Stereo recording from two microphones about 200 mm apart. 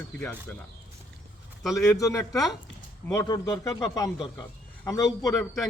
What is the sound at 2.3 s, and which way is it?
Speech, centre (ahead or behind).